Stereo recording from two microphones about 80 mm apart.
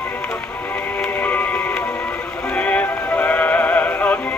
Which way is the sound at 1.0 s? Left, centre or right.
Left.